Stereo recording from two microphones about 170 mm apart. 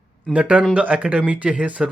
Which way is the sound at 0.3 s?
5° right (ahead or behind).